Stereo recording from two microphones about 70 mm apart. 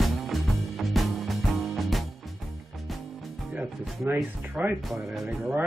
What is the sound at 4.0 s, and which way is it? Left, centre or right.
Speech, right.